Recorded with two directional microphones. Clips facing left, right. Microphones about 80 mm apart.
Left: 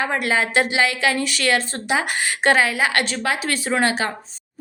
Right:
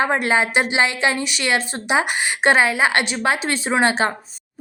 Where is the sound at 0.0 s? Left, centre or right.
Right.